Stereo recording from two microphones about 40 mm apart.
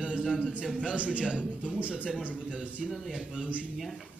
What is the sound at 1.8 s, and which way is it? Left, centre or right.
A man's voice, right.